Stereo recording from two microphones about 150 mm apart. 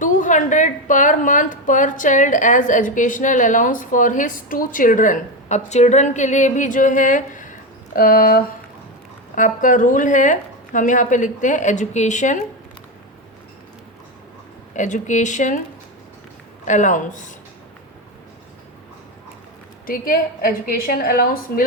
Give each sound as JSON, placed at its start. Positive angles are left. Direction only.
{"t": 0.0, "sound": "a woman's voice", "side_deg": 60}
{"t": 7.9, "sound": "a woman's voice", "side_deg": 70}
{"t": 9.3, "sound": "a woman's voice", "side_deg": 60}
{"t": 14.8, "sound": "a woman's voice", "side_deg": 55}
{"t": 16.6, "sound": "a woman's voice", "side_deg": 55}
{"t": 19.9, "sound": "a woman's voice", "side_deg": 70}